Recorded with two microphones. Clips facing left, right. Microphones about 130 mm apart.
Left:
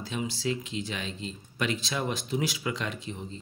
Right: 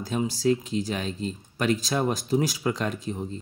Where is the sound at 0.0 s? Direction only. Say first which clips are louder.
Right 7 dB; 40° right (ahead or behind).